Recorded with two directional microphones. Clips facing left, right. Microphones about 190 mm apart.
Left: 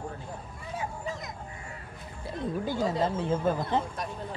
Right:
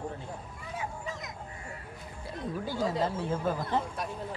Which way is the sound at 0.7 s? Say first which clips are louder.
Left 3 dB; 35° left (ahead or behind).